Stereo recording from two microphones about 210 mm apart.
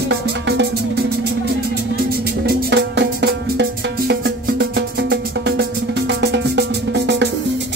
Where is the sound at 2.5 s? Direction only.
55° right (ahead or behind).